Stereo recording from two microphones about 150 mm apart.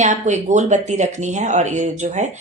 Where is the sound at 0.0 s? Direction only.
50° right (ahead or behind).